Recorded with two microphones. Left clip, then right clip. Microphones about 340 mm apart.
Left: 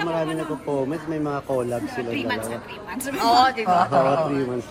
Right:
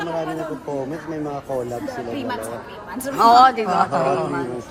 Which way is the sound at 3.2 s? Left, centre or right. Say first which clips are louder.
Right 6 dB; centre.